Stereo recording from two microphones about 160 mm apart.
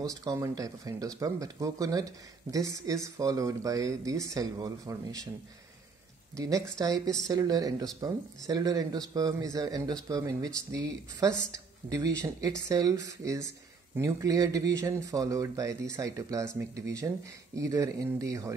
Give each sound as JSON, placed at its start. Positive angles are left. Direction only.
{"t": 0.1, "sound": "speech", "side_deg": -20}
{"t": 6.3, "sound": "speech", "side_deg": -20}